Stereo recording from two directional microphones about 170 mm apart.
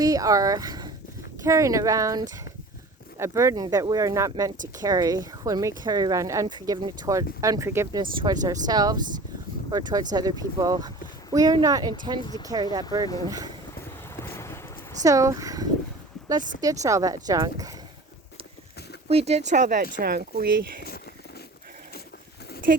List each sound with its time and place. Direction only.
0.0 s speech: 20° right (ahead or behind)
8.1 s speech: 30° right (ahead or behind)
14.2 s a sound: 15° left (ahead or behind)
15.0 s speech: 20° right (ahead or behind)
19.0 s speech: 40° right (ahead or behind)
20.0 s speech: 65° right (ahead or behind)
20.8 s a sound: 65° left (ahead or behind)